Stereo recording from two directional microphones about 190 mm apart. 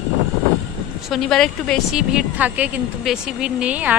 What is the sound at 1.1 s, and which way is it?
Speech, centre (ahead or behind).